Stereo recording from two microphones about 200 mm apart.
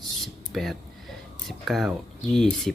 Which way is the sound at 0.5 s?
Centre (ahead or behind).